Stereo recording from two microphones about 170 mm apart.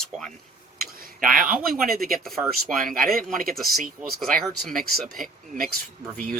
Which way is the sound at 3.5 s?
Centre (ahead or behind).